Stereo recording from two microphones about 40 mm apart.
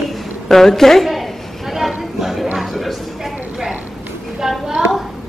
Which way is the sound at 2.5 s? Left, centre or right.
Centre.